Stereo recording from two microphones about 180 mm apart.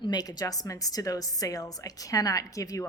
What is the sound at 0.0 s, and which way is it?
A woman's voice, 20° left (ahead or behind).